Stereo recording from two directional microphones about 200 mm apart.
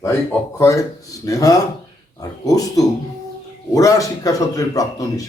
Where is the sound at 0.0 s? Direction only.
15° left (ahead or behind).